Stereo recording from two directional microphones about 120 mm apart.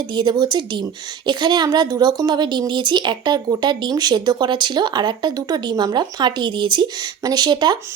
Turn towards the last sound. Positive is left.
turn(degrees=-35)  # may be behind; listen again after turning